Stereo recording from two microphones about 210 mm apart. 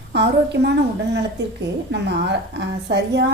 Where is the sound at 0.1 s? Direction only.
55° right (ahead or behind).